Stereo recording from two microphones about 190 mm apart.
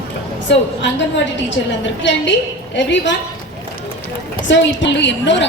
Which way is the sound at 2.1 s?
75° left (ahead or behind).